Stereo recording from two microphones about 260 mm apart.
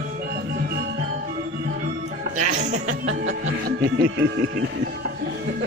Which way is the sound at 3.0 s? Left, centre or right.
Right.